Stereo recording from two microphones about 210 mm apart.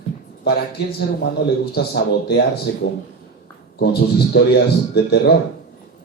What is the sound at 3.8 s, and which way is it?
A man's voice, 50° left (ahead or behind).